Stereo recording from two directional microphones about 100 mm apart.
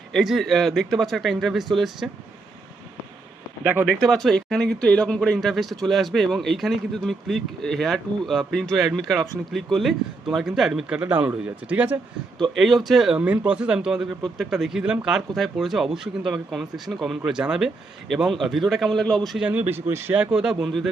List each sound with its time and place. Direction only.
0.1 s speech: centre (ahead or behind)
3.6 s speech: 15° right (ahead or behind)
4.0 s speech: centre (ahead or behind); by 11.9 s 15° right (ahead or behind)
12.5 s speech: centre (ahead or behind)
19.4 s speech: 15° right (ahead or behind)